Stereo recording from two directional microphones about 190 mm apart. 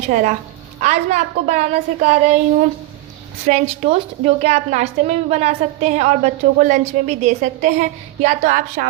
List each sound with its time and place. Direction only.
0.1 s a woman's voice: 45° right (ahead or behind)
3.4 s a woman's voice: 40° right (ahead or behind)